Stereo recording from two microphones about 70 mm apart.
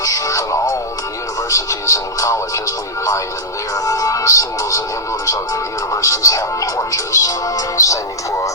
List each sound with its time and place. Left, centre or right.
0.0 s music: left
5.9 s music: left